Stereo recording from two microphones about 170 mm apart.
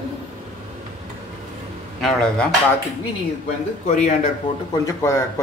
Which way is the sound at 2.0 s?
5° left (ahead or behind).